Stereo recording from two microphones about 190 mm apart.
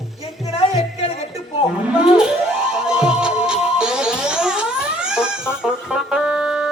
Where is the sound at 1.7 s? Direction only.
5° right (ahead or behind).